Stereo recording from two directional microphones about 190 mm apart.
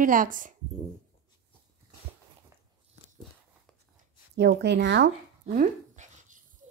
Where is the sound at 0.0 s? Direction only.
45° right (ahead or behind).